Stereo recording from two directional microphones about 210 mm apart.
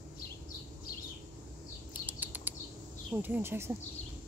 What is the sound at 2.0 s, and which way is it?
Chirp, 10° right (ahead or behind).